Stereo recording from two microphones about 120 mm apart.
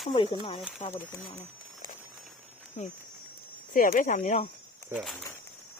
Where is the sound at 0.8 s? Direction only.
65° left (ahead or behind).